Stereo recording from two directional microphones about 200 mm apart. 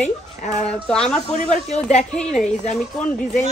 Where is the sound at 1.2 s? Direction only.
35° left (ahead or behind).